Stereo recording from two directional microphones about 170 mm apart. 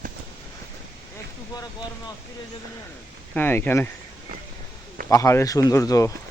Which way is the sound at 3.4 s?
10° left (ahead or behind).